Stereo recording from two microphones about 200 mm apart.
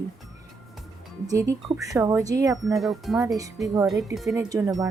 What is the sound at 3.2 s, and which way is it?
Speech, 15° right (ahead or behind).